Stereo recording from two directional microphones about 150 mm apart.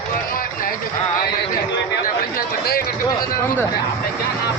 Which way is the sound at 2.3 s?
90° left.